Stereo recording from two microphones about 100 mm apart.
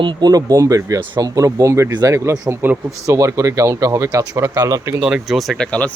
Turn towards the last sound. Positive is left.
turn(degrees=10)  # may be behind; listen again after turning